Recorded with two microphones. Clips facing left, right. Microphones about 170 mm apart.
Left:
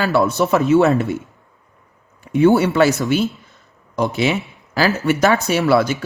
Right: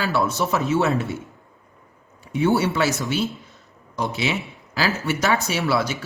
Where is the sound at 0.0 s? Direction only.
60° left (ahead or behind).